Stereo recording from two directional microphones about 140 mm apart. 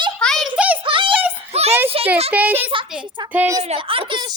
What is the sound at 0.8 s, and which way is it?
A child's voice, 35° right (ahead or behind).